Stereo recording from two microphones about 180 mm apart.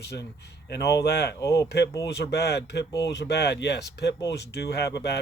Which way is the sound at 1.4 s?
15° left (ahead or behind).